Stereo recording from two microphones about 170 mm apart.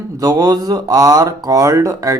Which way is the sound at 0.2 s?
20° right (ahead or behind).